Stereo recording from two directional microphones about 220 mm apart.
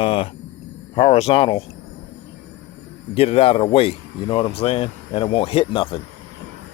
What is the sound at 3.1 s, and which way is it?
Speech, 25° left (ahead or behind).